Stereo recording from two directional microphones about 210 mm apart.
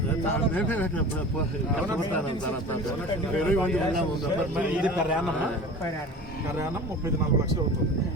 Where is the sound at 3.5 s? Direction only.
5° left (ahead or behind).